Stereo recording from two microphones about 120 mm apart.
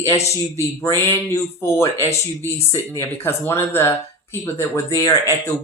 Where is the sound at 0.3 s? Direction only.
25° left (ahead or behind).